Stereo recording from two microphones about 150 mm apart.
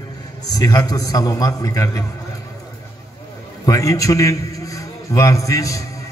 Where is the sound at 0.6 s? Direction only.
25° left (ahead or behind).